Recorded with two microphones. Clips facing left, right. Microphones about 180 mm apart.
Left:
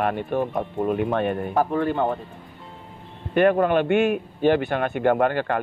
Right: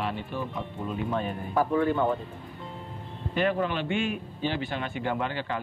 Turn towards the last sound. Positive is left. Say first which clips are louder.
# left 10 dB
turn(degrees=55)  # may be behind; listen again after turning